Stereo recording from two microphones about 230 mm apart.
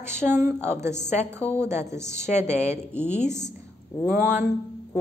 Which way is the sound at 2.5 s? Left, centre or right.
Left.